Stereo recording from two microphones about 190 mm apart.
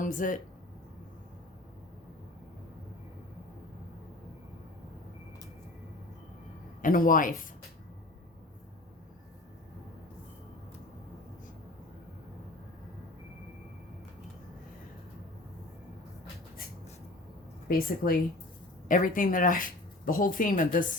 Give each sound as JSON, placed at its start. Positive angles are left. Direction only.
{"t": 0.0, "sound": "speech", "side_deg": 45}
{"t": 6.8, "sound": "speech", "side_deg": 45}
{"t": 17.7, "sound": "speech", "side_deg": 50}